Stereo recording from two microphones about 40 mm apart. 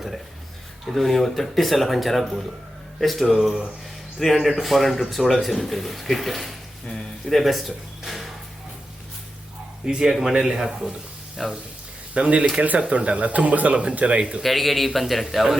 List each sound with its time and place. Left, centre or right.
0.9 s a man's voice: centre
9.8 s a man's voice: centre
12.1 s speech: right
14.4 s a man's voice: centre